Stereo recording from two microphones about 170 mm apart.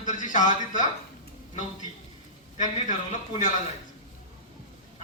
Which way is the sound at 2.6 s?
45° left (ahead or behind).